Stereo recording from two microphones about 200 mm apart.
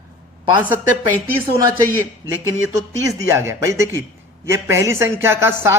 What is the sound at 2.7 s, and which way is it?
A man's voice, 15° right (ahead or behind).